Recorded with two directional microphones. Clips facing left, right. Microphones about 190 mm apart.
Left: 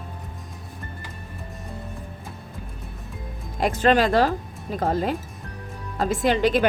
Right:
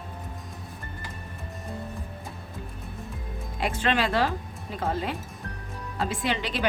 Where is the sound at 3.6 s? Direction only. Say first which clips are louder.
Left 7 dB; 45° left (ahead or behind).